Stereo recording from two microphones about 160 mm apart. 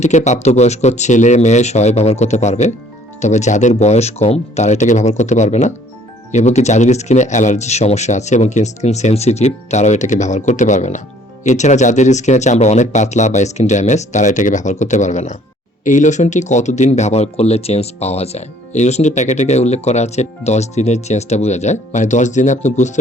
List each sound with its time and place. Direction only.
0.0 s speech: 45° left (ahead or behind)